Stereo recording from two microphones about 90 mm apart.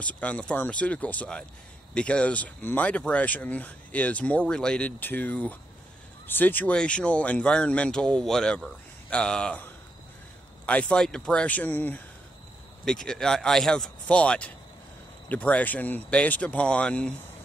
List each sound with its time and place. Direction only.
0.0 s speech: 15° left (ahead or behind)
10.6 s speech: 10° left (ahead or behind)
12.8 s speech: 5° left (ahead or behind)